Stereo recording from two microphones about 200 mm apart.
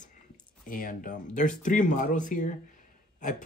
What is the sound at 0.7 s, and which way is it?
Speech, 40° left (ahead or behind).